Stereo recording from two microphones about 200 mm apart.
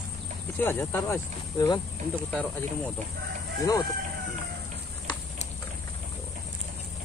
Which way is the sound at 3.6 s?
15° left (ahead or behind).